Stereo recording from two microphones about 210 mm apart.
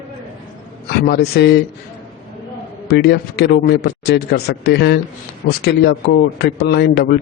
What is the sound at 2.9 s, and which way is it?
A man's voice, 50° left (ahead or behind).